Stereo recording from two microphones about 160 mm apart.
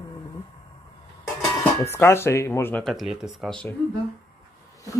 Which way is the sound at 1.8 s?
15° left (ahead or behind).